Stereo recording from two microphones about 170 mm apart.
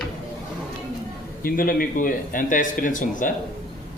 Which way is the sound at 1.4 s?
55° left (ahead or behind).